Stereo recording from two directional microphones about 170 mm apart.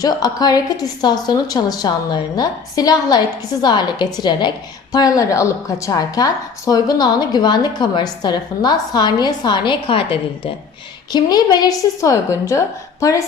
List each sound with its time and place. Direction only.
0.0 s a woman's voice: 25° left (ahead or behind)